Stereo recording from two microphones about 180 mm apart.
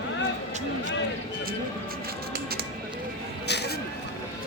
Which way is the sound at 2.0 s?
60° right (ahead or behind).